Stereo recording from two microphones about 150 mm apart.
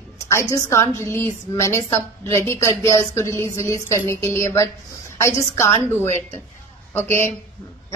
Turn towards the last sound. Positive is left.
turn(degrees=15)  # may be behind; listen again after turning